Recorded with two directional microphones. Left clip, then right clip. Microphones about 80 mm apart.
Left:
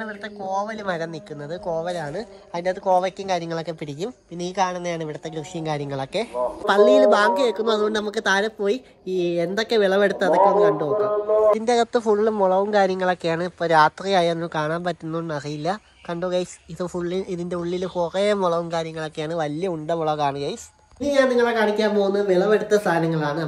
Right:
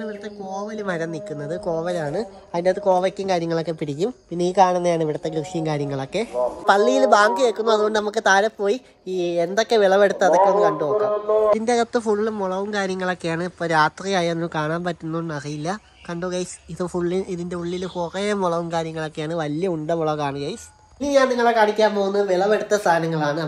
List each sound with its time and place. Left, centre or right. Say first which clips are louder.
0.8 s speech: right 1 dB; right
1.7 s a woman's voice: right 2 dB; right
5.2 s speech: right 5 dB; right
6.6 s a woman's voice: left 2 dB; centre
11.6 s speech: left 1 dB; right
12.0 s a woman's voice: left 3 dB; centre; by 15.0 s right
15.3 s speech: left 2 dB; centre
16.9 s speech: right 4 dB; right
17.3 s a woman's voice: left 1 dB; centre
18.7 s speech: right 1 dB; right
21.0 s a woman's voice: right 1 dB; centre